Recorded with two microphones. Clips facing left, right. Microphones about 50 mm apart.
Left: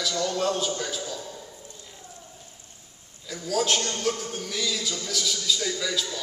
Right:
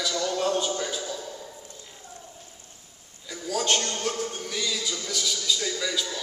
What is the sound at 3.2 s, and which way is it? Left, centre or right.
A man's voice, centre.